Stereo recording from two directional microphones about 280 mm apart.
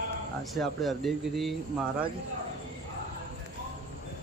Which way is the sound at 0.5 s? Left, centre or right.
Centre.